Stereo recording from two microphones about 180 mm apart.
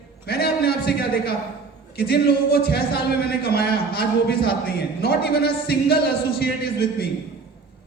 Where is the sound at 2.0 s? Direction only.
60° left (ahead or behind).